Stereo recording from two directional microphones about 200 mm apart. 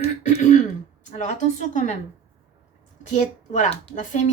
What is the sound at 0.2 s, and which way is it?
Throat clearing, 35° left (ahead or behind).